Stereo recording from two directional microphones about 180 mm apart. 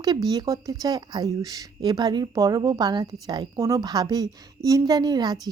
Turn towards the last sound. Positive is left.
turn(degrees=-20)  # may be behind; listen again after turning